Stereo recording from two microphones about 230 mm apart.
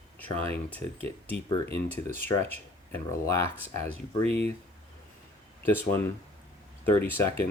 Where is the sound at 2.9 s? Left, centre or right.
Centre.